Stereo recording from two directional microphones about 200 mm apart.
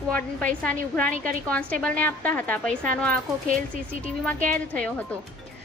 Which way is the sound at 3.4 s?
40° right (ahead or behind).